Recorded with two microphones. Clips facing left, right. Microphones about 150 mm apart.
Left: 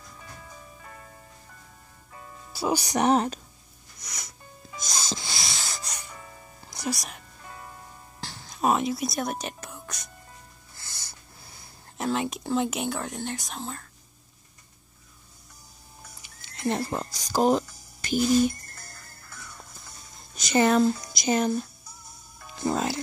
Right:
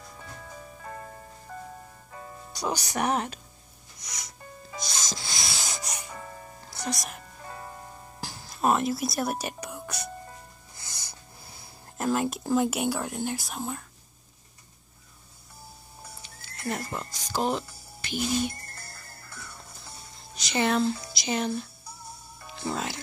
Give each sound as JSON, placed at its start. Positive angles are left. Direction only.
{"t": 2.5, "sound": "speech", "side_deg": 10}
{"t": 3.1, "sound": "a woman's voice", "side_deg": 35}
{"t": 4.0, "sound": "music", "side_deg": 55}
{"t": 4.7, "sound": "music", "side_deg": 45}
{"t": 5.6, "sound": "music", "side_deg": -20}
{"t": 6.9, "sound": "speech", "side_deg": 0}
{"t": 7.4, "sound": "music", "side_deg": -40}
{"t": 8.2, "sound": "whispering", "side_deg": -5}
{"t": 10.8, "sound": "wheeze", "side_deg": -15}
{"t": 12.0, "sound": "speech", "side_deg": -5}
{"t": 16.2, "sound": "music", "side_deg": 20}
{"t": 18.0, "sound": "speech", "side_deg": 40}
{"t": 20.3, "sound": "speech", "side_deg": 45}
{"t": 22.6, "sound": "music", "side_deg": 35}